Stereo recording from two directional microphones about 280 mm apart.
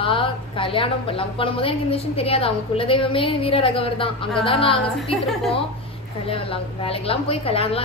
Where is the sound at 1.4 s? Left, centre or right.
Centre.